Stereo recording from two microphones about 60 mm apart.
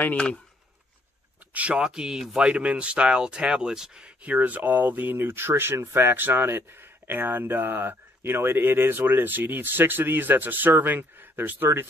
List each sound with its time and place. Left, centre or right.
0.0 s speech: left
1.5 s speech: right
1.8 s speech: centre
4.2 s speech: right